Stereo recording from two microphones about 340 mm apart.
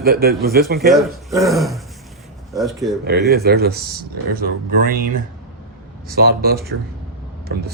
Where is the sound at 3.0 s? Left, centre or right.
Right.